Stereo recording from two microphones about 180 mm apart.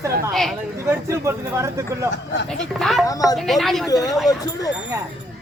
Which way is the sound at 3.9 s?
20° left (ahead or behind).